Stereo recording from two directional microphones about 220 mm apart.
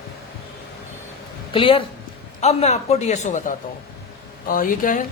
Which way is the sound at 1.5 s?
25° left (ahead or behind).